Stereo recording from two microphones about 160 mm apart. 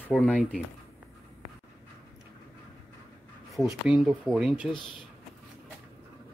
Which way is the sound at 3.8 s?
5° right (ahead or behind).